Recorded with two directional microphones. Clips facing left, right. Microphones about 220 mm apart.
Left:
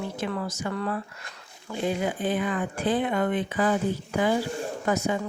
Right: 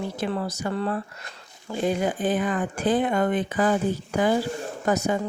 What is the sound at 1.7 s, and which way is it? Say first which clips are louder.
A woman's voice: right 3 dB; 45° right (ahead or behind).